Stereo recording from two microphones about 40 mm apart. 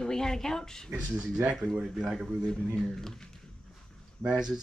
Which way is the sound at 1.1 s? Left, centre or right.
Right.